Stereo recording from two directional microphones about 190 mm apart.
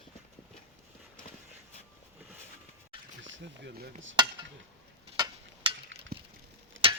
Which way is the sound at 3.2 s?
70° right (ahead or behind).